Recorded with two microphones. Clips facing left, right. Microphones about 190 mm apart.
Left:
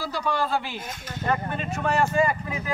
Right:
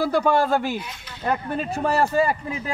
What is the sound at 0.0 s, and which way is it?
Speech, 55° right (ahead or behind).